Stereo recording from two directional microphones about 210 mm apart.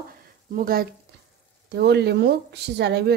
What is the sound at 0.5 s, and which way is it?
A woman's voice, 45° right (ahead or behind).